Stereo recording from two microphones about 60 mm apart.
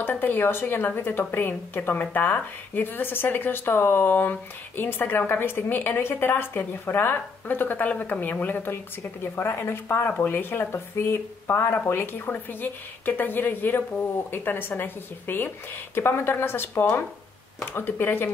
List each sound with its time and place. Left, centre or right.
0.0 s a woman's voice: left